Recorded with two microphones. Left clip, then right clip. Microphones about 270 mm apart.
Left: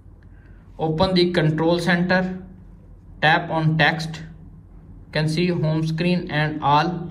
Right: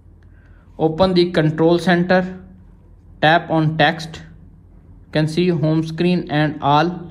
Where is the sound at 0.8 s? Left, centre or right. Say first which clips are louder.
Right 4 dB; right.